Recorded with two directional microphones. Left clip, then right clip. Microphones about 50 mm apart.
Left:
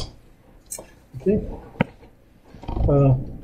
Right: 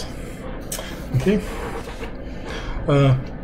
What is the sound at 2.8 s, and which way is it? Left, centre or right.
Speech, centre.